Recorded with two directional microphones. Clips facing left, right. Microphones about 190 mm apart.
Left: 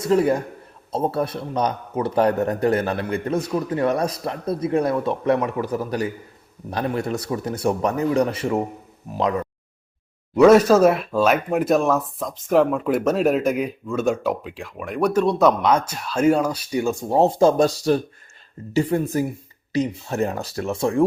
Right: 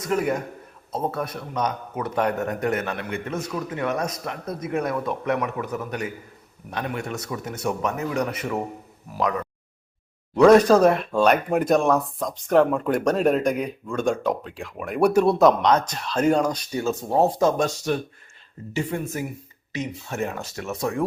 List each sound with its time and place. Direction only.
0.0 s speech: 30° left (ahead or behind)
10.3 s speech: 5° left (ahead or behind); by 21.0 s 30° left (ahead or behind)